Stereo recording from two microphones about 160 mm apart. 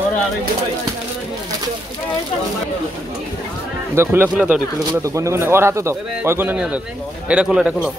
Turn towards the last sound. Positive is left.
turn(degrees=-5)  # may be behind; listen again after turning